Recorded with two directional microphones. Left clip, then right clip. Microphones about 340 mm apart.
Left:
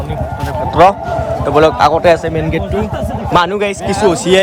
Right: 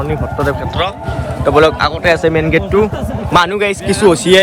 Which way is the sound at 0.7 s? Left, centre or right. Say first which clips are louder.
Left 9 dB; centre.